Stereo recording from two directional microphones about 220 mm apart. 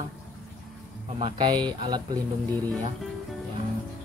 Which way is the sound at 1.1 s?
20° right (ahead or behind).